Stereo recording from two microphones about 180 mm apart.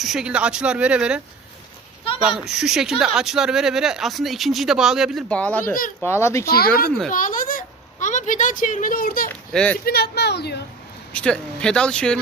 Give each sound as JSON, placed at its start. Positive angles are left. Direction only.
{"t": 0.0, "sound": "speech", "side_deg": 0}
{"t": 2.2, "sound": "speech", "side_deg": 0}
{"t": 7.1, "sound": "a sound", "side_deg": 50}
{"t": 9.3, "sound": "a sound", "side_deg": 5}
{"t": 9.8, "sound": "speech", "side_deg": 60}
{"t": 11.1, "sound": "speech", "side_deg": 5}